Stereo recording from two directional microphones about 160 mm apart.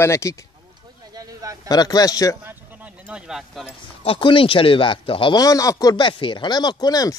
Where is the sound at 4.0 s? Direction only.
35° left (ahead or behind).